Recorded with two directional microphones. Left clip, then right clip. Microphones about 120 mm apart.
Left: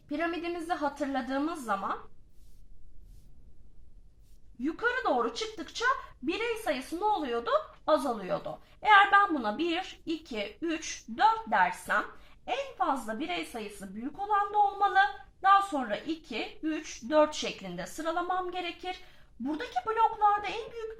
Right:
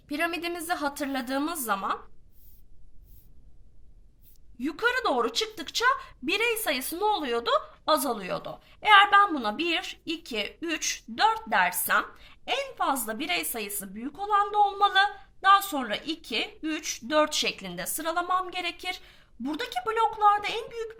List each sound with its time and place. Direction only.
0.1 s a woman's voice: 30° right (ahead or behind)
4.6 s a woman's voice: 30° right (ahead or behind)
12.7 s a woman's voice: 45° right (ahead or behind)
13.1 s a woman's voice: 35° right (ahead or behind)